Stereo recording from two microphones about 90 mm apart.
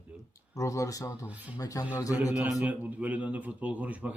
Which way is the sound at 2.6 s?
15° right (ahead or behind).